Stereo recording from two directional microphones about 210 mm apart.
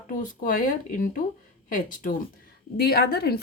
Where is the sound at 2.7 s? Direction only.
45° left (ahead or behind).